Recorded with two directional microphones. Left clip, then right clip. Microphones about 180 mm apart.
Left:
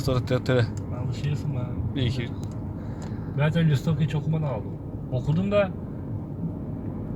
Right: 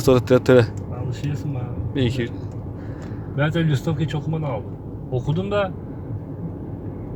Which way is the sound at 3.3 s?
60° right (ahead or behind).